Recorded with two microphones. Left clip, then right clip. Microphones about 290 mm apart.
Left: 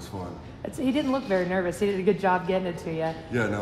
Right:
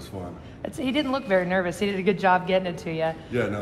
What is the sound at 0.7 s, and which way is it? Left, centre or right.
A woman's voice, right.